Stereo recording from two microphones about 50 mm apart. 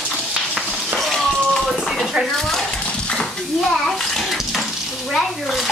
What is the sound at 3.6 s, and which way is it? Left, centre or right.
Bathtub, centre.